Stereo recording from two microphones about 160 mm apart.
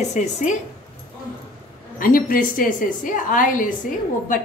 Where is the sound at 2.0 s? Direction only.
60° left (ahead or behind).